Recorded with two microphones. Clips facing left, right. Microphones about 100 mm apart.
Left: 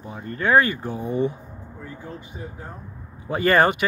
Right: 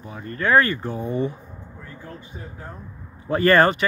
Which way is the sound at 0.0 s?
20° left (ahead or behind).